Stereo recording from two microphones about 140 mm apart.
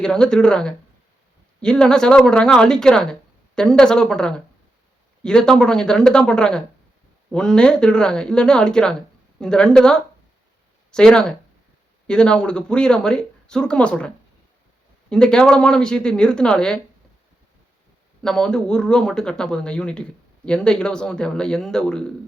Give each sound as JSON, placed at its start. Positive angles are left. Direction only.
{"t": 0.0, "sound": "speech", "side_deg": 5}
{"t": 15.1, "sound": "speech", "side_deg": 5}
{"t": 18.2, "sound": "speech", "side_deg": 5}